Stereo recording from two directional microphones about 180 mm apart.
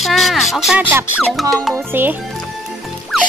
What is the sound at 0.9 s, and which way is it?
Speech, 15° right (ahead or behind).